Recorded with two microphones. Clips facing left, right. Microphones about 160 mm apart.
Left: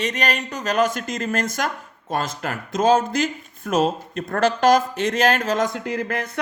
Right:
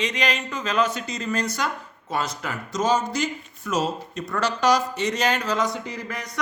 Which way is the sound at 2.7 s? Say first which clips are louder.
Left 5 dB; 55° left (ahead or behind).